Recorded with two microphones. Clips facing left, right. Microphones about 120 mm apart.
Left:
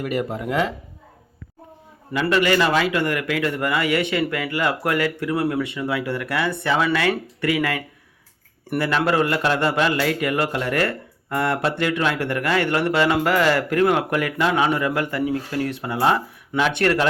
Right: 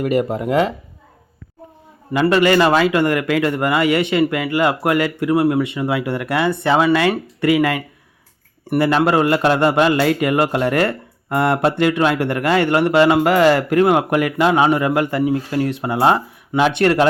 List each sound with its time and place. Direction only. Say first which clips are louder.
0.0 s speech: right 6 dB; 25° right (ahead or behind)
2.1 s speech: right 5 dB; 30° right (ahead or behind)